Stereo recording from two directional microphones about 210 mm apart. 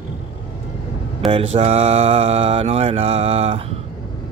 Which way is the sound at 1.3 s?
30° right (ahead or behind).